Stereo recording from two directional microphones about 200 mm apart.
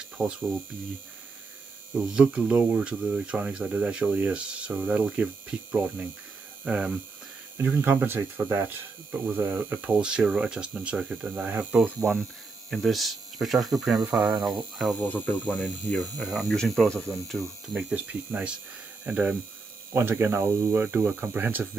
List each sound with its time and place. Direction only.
0.2 s speech: 20° right (ahead or behind)
2.1 s speech: 5° right (ahead or behind)
6.6 s hum: 5° right (ahead or behind)
7.5 s speech: 10° right (ahead or behind)